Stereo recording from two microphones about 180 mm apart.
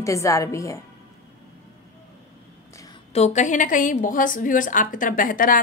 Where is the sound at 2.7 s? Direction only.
20° left (ahead or behind).